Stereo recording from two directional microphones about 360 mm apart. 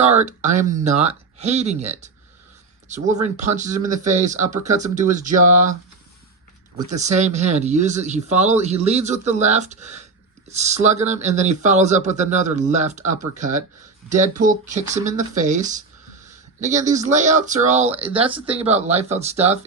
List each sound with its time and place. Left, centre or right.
0.0 s speech: centre
6.7 s speech: centre